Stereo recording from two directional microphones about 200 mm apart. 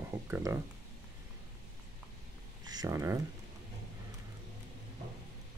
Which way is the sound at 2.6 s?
20° right (ahead or behind).